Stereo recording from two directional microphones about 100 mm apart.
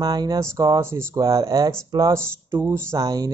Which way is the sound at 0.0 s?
40° right (ahead or behind).